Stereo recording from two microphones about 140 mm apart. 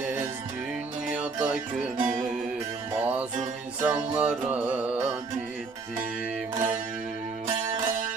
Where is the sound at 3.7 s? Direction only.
15° right (ahead or behind).